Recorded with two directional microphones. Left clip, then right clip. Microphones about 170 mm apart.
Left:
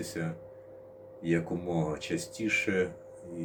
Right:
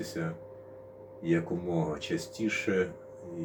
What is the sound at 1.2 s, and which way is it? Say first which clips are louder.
Speech: right 1 dB; 20° left (ahead or behind).